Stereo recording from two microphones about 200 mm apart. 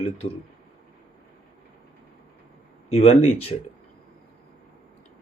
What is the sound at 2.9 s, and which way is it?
Speech, 30° left (ahead or behind).